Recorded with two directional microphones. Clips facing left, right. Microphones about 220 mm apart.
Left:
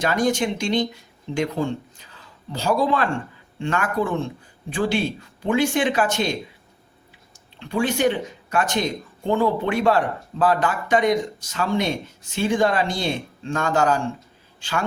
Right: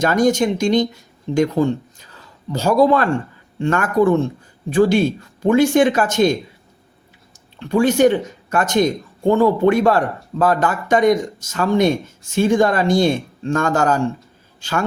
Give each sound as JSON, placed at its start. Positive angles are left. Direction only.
{"t": 0.0, "sound": "speech", "side_deg": -45}
{"t": 7.6, "sound": "a man's voice", "side_deg": -45}